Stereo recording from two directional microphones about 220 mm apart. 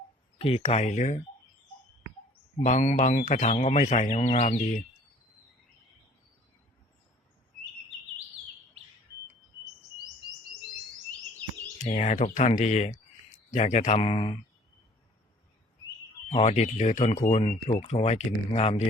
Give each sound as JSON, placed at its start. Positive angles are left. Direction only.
{"t": 0.3, "sound": "speech", "side_deg": 25}
{"t": 2.6, "sound": "speech", "side_deg": 30}
{"t": 11.8, "sound": "speech", "side_deg": 30}
{"t": 16.3, "sound": "speech", "side_deg": 30}